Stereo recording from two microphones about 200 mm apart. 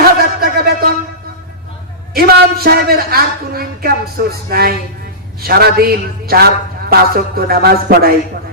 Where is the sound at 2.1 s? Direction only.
50° right (ahead or behind).